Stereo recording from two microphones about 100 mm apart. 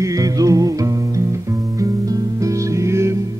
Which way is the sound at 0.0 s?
35° right (ahead or behind).